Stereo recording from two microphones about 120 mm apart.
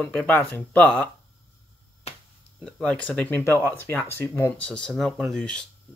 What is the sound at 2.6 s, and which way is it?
Speech, 10° left (ahead or behind).